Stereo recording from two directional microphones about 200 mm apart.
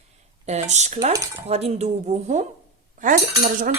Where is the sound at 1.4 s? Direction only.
30° right (ahead or behind).